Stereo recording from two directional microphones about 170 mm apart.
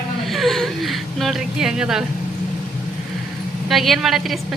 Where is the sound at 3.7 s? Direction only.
Centre (ahead or behind).